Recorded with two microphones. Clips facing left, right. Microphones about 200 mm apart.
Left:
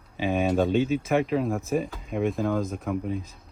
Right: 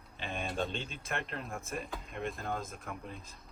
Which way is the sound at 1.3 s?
60° left (ahead or behind).